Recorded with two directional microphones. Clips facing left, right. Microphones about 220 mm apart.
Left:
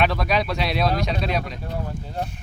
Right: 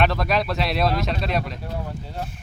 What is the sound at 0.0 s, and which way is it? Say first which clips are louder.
Speech: even; centre (ahead or behind).